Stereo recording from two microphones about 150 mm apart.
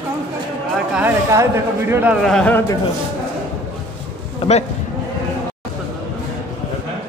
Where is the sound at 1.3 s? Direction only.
15° right (ahead or behind).